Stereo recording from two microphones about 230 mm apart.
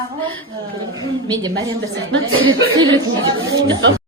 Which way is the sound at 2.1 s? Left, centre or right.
Right.